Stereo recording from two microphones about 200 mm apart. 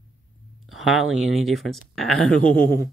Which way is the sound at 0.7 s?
Centre (ahead or behind).